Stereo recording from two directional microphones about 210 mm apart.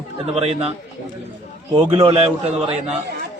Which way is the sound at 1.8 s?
25° right (ahead or behind).